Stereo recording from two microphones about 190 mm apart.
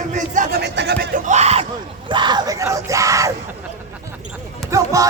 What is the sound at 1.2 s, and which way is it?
Speech, 35° right (ahead or behind).